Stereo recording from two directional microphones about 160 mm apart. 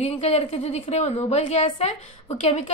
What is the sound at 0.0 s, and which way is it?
A woman's voice, 45° left (ahead or behind).